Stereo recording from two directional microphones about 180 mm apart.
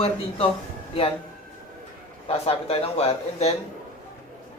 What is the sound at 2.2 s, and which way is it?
Speech, 35° left (ahead or behind).